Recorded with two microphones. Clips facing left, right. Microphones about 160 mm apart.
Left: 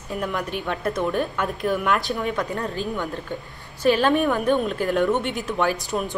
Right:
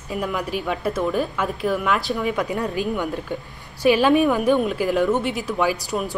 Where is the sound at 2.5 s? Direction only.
15° right (ahead or behind).